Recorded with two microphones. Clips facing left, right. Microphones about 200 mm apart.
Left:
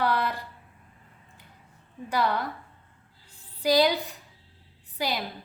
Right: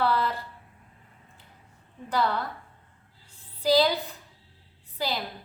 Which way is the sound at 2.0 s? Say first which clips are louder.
Even; 10° left (ahead or behind).